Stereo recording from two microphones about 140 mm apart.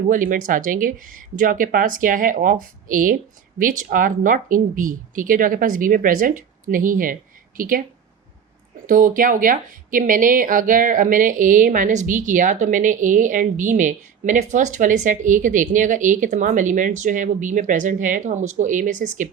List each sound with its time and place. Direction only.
0.1 s speech: 75° right (ahead or behind)
8.9 s speech: 75° right (ahead or behind)